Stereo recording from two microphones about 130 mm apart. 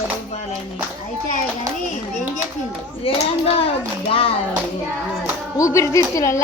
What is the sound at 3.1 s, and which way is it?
Speech, 45° left (ahead or behind).